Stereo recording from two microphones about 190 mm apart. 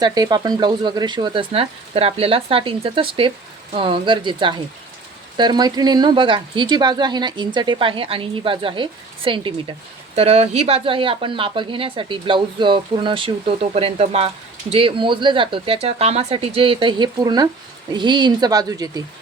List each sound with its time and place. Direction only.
0.0 s speech: 20° right (ahead or behind)